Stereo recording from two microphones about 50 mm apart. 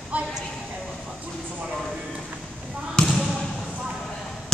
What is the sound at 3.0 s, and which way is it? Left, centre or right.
Basketball bounce, centre.